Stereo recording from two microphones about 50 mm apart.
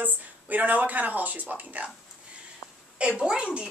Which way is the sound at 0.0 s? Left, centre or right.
Right.